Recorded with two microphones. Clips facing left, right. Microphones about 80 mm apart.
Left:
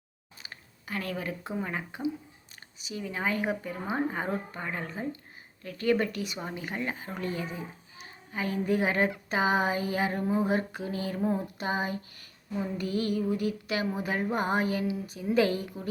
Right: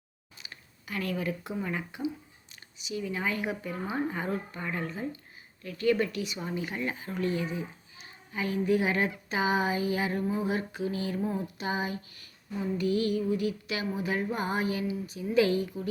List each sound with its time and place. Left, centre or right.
0.4 s speech: left
11.5 s speech: left
12.7 s a sound: left